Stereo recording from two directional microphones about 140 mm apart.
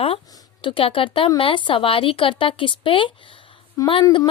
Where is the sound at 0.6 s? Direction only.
40° left (ahead or behind).